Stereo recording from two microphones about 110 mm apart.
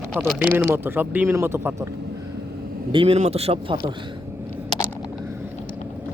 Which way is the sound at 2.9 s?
50° right (ahead or behind).